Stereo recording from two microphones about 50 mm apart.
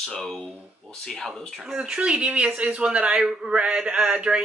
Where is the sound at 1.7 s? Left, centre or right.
Centre.